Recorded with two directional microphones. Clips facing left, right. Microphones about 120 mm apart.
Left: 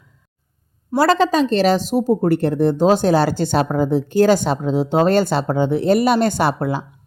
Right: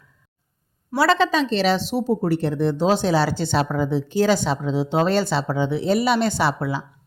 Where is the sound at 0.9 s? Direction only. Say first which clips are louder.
Left 3 dB; 45° left (ahead or behind).